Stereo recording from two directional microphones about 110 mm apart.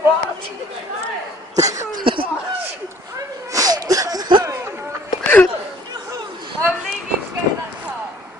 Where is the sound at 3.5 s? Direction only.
35° right (ahead or behind).